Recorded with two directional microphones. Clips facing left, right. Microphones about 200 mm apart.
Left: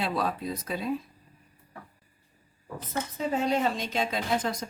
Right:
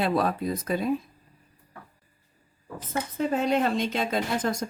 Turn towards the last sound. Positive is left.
turn(degrees=-50)  # may be behind; listen again after turning